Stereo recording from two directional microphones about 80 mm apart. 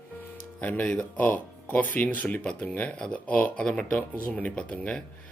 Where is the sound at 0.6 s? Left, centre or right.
Centre.